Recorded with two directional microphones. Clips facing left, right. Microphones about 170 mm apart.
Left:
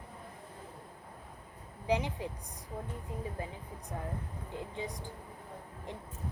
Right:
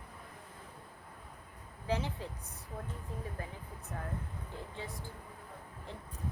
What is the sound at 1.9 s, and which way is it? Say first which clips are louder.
Speech: left 4 dB; 15° left (ahead or behind).